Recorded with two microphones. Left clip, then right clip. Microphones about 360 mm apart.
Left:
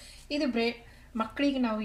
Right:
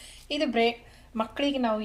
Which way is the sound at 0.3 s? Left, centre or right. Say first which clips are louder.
Right 4 dB; right.